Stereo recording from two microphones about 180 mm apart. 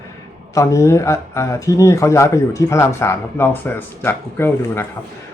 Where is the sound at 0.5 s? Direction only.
15° left (ahead or behind).